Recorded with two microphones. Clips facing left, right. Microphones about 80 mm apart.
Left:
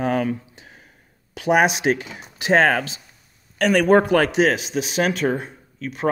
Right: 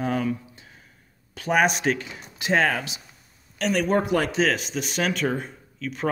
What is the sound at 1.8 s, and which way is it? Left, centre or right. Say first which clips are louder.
Speech: left 4 dB; left.